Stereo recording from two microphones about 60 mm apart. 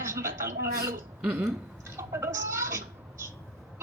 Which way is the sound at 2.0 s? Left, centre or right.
Right.